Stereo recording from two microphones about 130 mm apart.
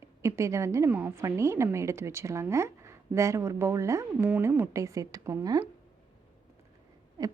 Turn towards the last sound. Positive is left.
turn(degrees=-30)  # may be behind; listen again after turning